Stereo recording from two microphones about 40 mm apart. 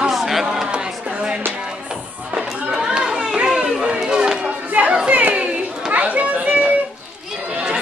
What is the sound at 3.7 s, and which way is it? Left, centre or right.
Run, centre.